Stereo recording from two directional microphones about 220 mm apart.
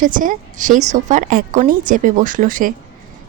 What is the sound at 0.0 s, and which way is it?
Speech, 35° right (ahead or behind).